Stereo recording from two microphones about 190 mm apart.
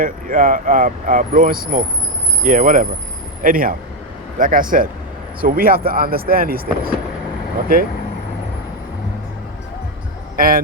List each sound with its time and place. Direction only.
0.0 s speech: 45° right (ahead or behind)
10.3 s speech: 50° right (ahead or behind)